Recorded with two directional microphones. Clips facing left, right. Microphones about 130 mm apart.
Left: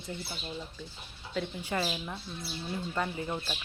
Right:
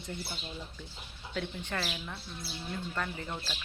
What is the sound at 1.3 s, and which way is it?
Speech, 5° left (ahead or behind).